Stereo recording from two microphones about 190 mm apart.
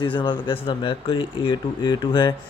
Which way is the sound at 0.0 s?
25° left (ahead or behind).